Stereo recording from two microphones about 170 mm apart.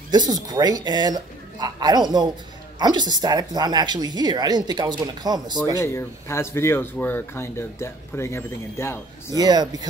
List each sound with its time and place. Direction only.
0.1 s speech: 25° right (ahead or behind)
5.8 s speech: 15° left (ahead or behind)
9.3 s speech: 25° right (ahead or behind)